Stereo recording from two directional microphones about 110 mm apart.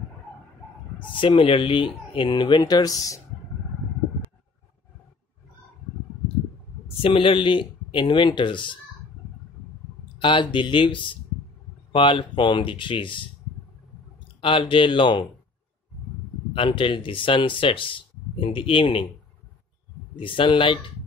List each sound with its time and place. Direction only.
1.2 s speech: 55° left (ahead or behind); by 3.2 s 30° left (ahead or behind)
7.0 s speech: 55° left (ahead or behind)
10.1 s speech: 50° left (ahead or behind)
14.4 s speech: 50° left (ahead or behind)
16.5 s speech: 50° left (ahead or behind)
20.2 s speech: 50° left (ahead or behind)